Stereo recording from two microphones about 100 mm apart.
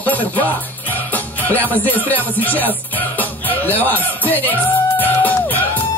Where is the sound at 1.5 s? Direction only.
15° left (ahead or behind).